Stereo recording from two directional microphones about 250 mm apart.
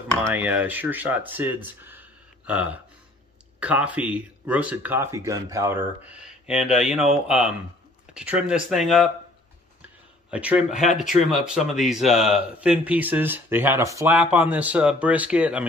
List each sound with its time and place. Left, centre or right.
0.2 s speech: centre
10.3 s speech: centre
10.7 s speech: left
11.2 s speech: centre